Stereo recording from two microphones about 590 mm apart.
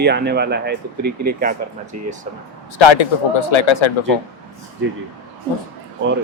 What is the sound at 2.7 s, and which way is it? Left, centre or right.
A man's voice, left.